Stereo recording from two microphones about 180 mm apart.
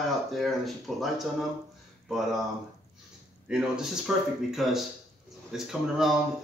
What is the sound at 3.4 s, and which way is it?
Speech, 5° right (ahead or behind).